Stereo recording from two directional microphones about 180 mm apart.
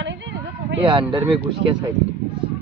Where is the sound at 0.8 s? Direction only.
30° right (ahead or behind).